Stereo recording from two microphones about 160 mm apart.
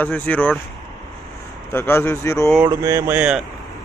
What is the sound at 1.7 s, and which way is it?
Speech, 15° left (ahead or behind).